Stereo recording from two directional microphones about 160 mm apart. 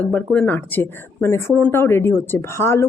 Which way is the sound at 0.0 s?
10° left (ahead or behind).